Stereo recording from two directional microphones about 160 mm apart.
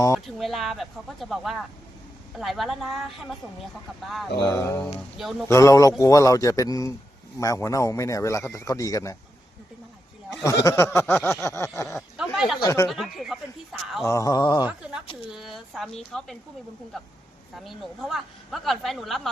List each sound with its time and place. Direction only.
0.3 s a woman's voice: centre (ahead or behind)
4.5 s a sound: 15° left (ahead or behind)
5.5 s a man's voice: 20° left (ahead or behind)
10.4 s a sound: 20° left (ahead or behind)
11.9 s a sound: centre (ahead or behind)
12.6 s a man's voice: 20° left (ahead or behind)
13.1 s speech: centre (ahead or behind)
14.0 s a man's voice: 20° left (ahead or behind)
14.7 s speech: 5° right (ahead or behind)
17.5 s a woman's voice: centre (ahead or behind)